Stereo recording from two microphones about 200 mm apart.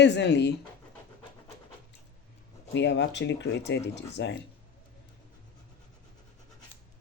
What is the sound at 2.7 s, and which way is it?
Speech, 60° left (ahead or behind).